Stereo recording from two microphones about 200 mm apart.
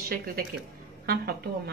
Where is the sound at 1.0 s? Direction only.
50° right (ahead or behind).